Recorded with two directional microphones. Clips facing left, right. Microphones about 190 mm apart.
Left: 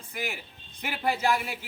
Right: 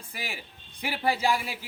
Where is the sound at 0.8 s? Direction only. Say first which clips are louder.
Right 1 dB; 10° right (ahead or behind).